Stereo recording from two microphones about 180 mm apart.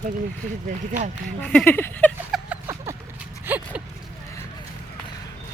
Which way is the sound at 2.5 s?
15° right (ahead or behind).